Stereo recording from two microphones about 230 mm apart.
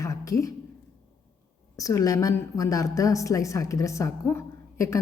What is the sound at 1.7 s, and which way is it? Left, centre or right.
A woman's voice, centre.